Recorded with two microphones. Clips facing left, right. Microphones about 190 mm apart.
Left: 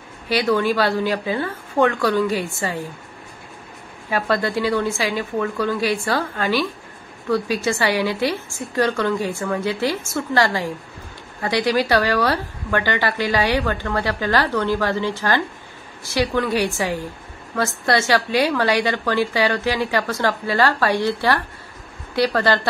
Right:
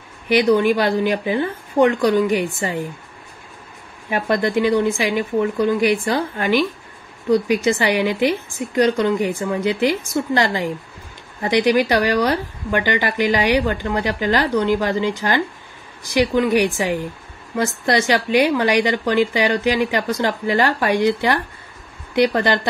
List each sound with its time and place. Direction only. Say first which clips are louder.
0.3 s speech: right 4 dB; 20° right (ahead or behind)
4.1 s a woman's voice: right 2 dB; 20° right (ahead or behind)